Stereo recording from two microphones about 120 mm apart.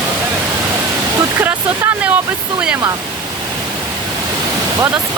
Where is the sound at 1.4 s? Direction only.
15° right (ahead or behind).